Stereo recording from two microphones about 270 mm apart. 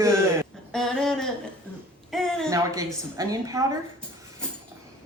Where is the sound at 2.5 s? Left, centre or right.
Centre.